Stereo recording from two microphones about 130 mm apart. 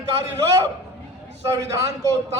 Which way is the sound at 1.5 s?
25° right (ahead or behind).